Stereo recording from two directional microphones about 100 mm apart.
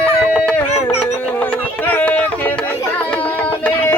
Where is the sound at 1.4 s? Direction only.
20° left (ahead or behind).